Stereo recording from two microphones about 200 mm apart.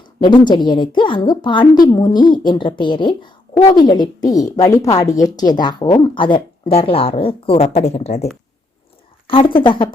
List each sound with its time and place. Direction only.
0.0 s a woman's voice: 20° left (ahead or behind)